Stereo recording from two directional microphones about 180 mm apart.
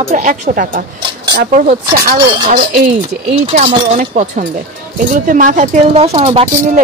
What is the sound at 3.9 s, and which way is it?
A woman's voice, 45° right (ahead or behind).